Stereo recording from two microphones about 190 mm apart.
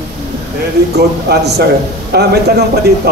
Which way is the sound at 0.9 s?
60° right (ahead or behind).